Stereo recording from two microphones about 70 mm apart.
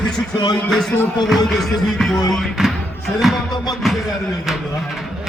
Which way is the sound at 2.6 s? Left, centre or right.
Centre.